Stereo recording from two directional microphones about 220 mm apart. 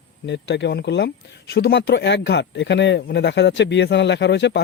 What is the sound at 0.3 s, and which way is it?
Speech, 50° left (ahead or behind).